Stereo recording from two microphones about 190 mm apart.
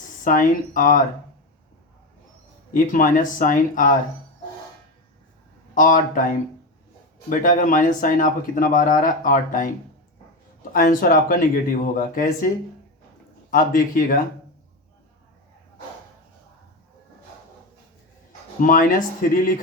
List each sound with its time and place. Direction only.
0.3 s speech: 45° left (ahead or behind)
2.7 s speech: 45° left (ahead or behind)
5.7 s speech: 45° left (ahead or behind)
13.5 s speech: 50° left (ahead or behind)
18.6 s speech: 45° left (ahead or behind)